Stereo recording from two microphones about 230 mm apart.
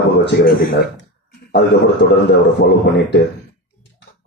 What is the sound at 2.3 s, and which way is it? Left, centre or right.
Speech, left.